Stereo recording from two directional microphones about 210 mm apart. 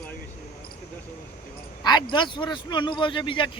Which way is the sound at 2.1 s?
20° left (ahead or behind).